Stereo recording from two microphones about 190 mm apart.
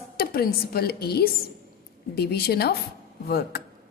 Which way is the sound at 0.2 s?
55° left (ahead or behind).